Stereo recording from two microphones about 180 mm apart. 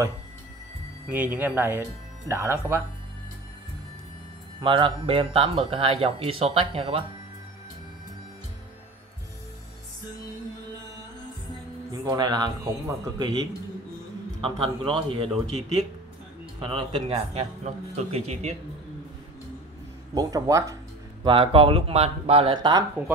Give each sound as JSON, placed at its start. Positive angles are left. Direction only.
{"t": 1.1, "sound": "speech", "side_deg": -10}
{"t": 4.6, "sound": "speech", "side_deg": -25}
{"t": 11.9, "sound": "speech", "side_deg": -20}
{"t": 14.4, "sound": "a man's voice", "side_deg": -30}
{"t": 16.5, "sound": "a man's voice", "side_deg": -30}
{"t": 20.2, "sound": "speech", "side_deg": -20}
{"t": 21.2, "sound": "a man's voice", "side_deg": -30}